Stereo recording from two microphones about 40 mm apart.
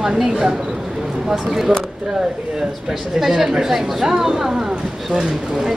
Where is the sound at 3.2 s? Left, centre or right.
Centre.